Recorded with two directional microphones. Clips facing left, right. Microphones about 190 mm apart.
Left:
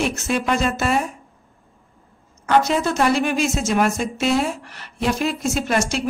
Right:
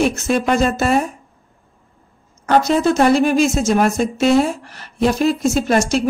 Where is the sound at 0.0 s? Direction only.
40° right (ahead or behind).